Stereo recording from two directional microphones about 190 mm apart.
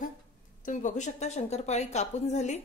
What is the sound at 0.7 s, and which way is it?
A woman's voice, 40° left (ahead or behind).